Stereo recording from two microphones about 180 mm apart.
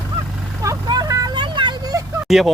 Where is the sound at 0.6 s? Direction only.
20° right (ahead or behind).